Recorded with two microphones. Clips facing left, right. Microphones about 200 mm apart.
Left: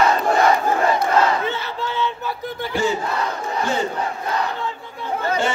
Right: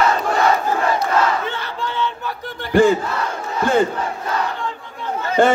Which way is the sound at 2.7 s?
55° right (ahead or behind).